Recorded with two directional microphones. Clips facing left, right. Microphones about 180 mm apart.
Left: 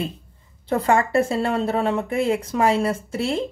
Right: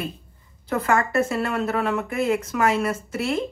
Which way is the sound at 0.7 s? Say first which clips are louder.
Left 3 dB; 30° left (ahead or behind).